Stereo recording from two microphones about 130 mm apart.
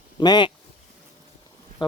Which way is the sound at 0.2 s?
35° left (ahead or behind).